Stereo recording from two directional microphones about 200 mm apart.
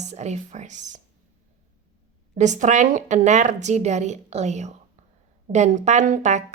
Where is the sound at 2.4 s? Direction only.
35° right (ahead or behind).